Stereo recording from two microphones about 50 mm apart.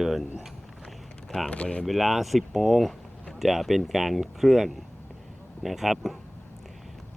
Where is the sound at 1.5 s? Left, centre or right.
Left.